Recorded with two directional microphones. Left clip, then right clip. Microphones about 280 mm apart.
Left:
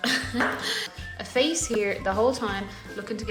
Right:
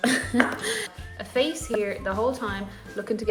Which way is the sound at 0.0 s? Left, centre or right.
Right.